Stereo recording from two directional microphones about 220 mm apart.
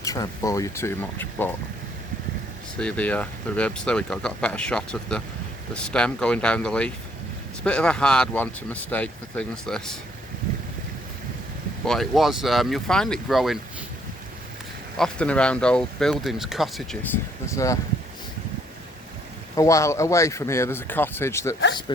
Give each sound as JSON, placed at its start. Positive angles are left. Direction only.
{"t": 0.0, "sound": "speech", "side_deg": 15}
{"t": 2.7, "sound": "speech", "side_deg": 5}
{"t": 11.9, "sound": "speech", "side_deg": 0}
{"t": 14.9, "sound": "speech", "side_deg": 5}
{"t": 17.5, "sound": "speech", "side_deg": 15}
{"t": 19.5, "sound": "speech", "side_deg": 15}